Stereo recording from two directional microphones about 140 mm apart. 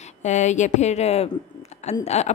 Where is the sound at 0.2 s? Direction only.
55° left (ahead or behind).